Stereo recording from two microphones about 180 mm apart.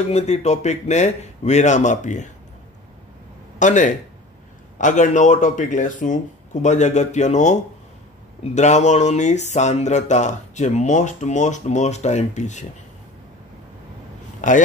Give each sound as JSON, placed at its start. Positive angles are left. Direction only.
{"t": 0.0, "sound": "speech", "side_deg": 40}
{"t": 3.5, "sound": "speech", "side_deg": 45}
{"t": 8.5, "sound": "speech", "side_deg": 40}